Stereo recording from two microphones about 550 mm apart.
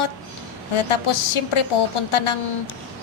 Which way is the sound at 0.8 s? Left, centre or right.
Left.